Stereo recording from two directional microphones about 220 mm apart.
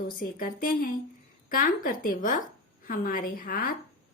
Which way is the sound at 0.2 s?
40° left (ahead or behind).